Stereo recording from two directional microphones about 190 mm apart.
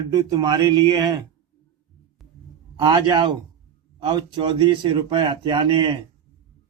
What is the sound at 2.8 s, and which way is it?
Speech, 25° right (ahead or behind).